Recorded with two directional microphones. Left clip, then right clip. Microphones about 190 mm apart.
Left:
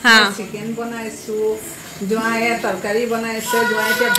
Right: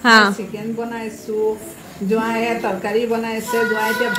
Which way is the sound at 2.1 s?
15° right (ahead or behind).